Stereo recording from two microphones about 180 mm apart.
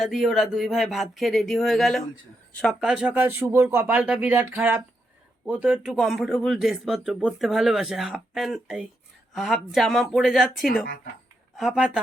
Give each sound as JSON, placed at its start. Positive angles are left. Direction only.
{"t": 0.0, "sound": "speech", "side_deg": 0}